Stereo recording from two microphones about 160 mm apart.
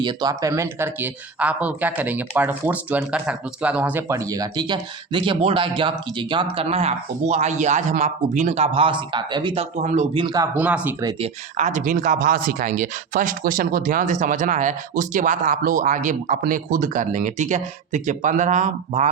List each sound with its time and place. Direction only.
0.0 s speech: 25° right (ahead or behind)
9.8 s speech: 45° right (ahead or behind)
10.2 s speech: 25° right (ahead or behind); by 10.9 s 10° right (ahead or behind)
11.2 s speech: 45° right (ahead or behind)